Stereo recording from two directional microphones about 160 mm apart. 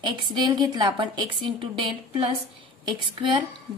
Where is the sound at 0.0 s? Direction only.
30° right (ahead or behind).